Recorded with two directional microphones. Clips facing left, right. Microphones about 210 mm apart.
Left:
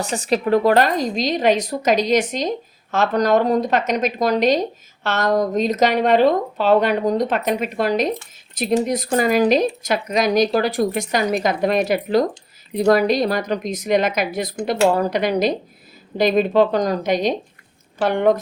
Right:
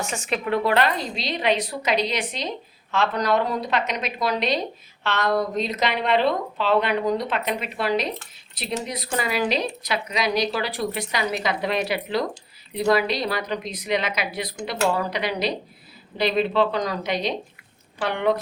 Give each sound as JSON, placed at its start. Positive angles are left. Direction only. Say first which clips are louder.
{"t": 0.0, "sound": "a woman's voice", "louder": "left 7 dB", "side_deg": 35}